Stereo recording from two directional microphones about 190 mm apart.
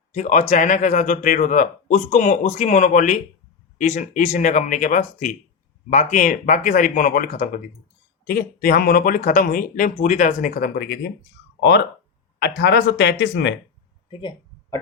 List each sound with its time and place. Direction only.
0.1 s speech: 40° left (ahead or behind)
12.4 s speech: 60° left (ahead or behind)
14.1 s a sound: 25° left (ahead or behind)